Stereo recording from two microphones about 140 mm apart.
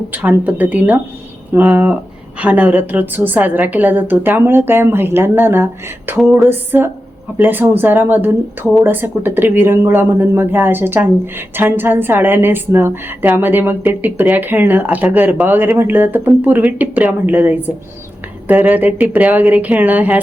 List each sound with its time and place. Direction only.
0.1 s speech: 10° right (ahead or behind)